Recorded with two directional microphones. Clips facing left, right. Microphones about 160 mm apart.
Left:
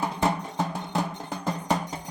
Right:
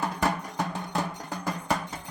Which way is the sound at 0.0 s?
20° left (ahead or behind).